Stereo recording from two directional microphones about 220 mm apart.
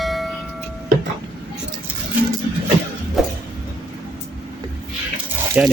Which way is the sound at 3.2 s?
Centre (ahead or behind).